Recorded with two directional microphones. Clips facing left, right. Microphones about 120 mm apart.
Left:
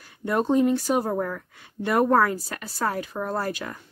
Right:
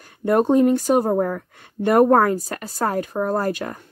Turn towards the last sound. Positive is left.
turn(degrees=-45)  # may be behind; listen again after turning